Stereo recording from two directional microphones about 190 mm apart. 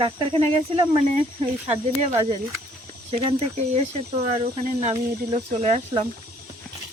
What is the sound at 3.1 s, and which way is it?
Speech, 35° right (ahead or behind).